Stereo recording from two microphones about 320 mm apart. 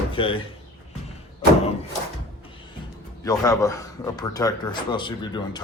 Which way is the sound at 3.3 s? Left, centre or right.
Centre.